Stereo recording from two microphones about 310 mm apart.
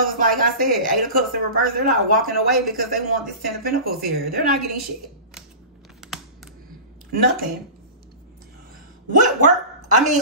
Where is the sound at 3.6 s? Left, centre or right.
Right.